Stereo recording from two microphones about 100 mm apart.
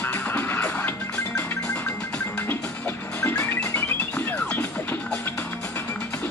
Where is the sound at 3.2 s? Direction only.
25° left (ahead or behind).